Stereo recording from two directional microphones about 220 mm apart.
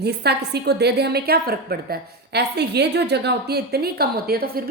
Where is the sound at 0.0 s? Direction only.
50° right (ahead or behind).